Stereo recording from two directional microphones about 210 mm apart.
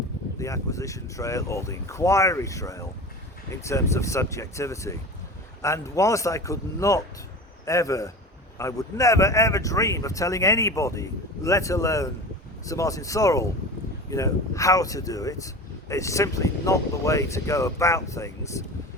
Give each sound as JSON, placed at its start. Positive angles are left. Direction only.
{"t": 0.3, "sound": "speech", "side_deg": 15}